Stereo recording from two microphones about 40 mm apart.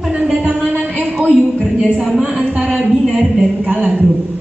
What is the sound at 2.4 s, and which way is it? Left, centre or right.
Speech, right.